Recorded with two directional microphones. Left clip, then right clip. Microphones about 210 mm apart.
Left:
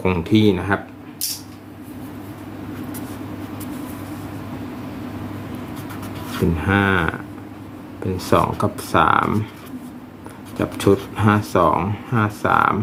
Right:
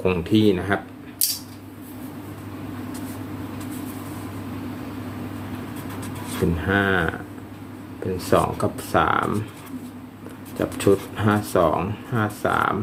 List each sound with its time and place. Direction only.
0.0 s speech: 25° left (ahead or behind)
6.7 s speech: 25° left (ahead or behind)
8.1 s speech: 25° left (ahead or behind)
10.6 s speech: 25° left (ahead or behind)